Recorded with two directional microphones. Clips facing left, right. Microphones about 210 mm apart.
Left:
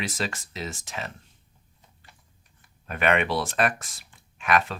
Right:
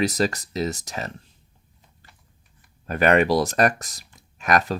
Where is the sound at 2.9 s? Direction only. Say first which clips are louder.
Right 6 dB; 40° right (ahead or behind).